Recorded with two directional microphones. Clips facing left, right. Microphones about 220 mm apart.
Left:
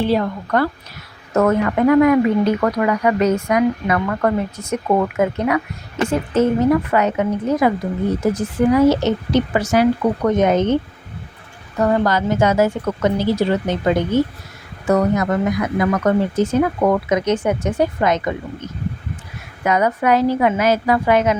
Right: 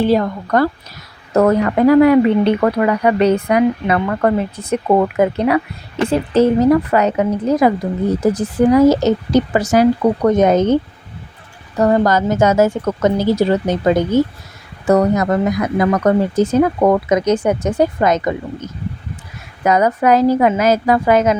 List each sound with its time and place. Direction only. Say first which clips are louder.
0.0 s a woman's voice: right 3 dB; 45° right (ahead or behind)
11.8 s a woman's voice: right 3 dB; 35° right (ahead or behind)
19.6 s speech: right 3 dB; 40° right (ahead or behind)